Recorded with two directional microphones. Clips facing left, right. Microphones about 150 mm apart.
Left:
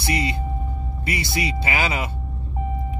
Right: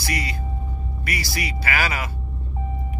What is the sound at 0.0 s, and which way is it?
Speech, 25° left (ahead or behind).